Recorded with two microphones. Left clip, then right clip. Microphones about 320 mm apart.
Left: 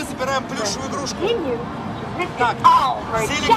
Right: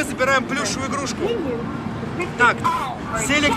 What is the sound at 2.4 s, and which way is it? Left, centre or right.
Speech, centre.